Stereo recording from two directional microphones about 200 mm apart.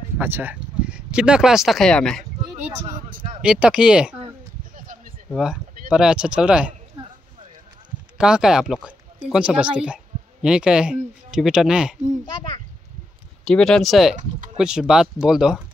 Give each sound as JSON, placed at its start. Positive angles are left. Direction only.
{"t": 0.2, "sound": "speech", "side_deg": -10}
{"t": 2.5, "sound": "a sound", "side_deg": -40}
{"t": 3.4, "sound": "speech", "side_deg": -5}
{"t": 4.7, "sound": "a sound", "side_deg": -45}
{"t": 5.3, "sound": "speech", "side_deg": -5}
{"t": 8.2, "sound": "speech", "side_deg": -5}
{"t": 13.5, "sound": "speech", "side_deg": 0}